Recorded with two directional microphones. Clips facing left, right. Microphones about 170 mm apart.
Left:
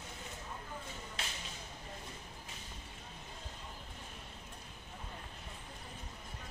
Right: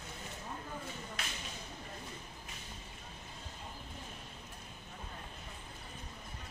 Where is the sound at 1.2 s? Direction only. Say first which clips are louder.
Left 2 dB; 30° left (ahead or behind).